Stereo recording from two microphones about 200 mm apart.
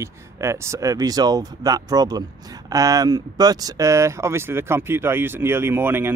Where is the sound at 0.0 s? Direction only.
15° right (ahead or behind).